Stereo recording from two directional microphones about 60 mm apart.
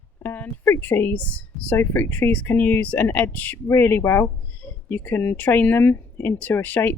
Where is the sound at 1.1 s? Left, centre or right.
Left.